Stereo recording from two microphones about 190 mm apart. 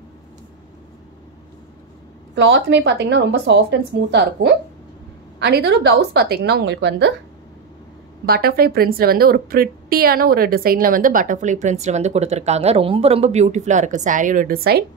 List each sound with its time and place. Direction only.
2.3 s a woman's voice: 70° right (ahead or behind)
8.3 s a woman's voice: 55° right (ahead or behind)